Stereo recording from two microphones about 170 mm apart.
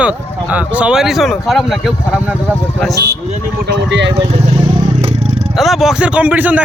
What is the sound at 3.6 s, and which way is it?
Speech, 90° right.